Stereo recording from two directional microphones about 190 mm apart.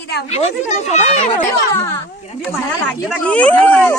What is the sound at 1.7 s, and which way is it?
Speech, 15° left (ahead or behind).